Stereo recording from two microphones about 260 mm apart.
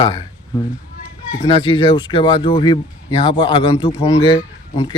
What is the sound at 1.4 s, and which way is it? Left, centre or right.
Speech, centre.